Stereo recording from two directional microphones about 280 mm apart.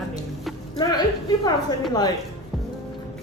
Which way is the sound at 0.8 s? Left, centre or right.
Centre.